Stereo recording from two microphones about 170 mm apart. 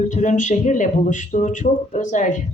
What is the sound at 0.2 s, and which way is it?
A woman's voice, 45° left (ahead or behind).